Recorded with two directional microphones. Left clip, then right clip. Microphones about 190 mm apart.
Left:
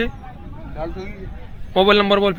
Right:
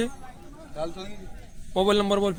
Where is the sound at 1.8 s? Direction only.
25° right (ahead or behind).